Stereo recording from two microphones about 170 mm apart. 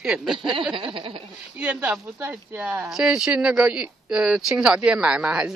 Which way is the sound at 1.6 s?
10° right (ahead or behind).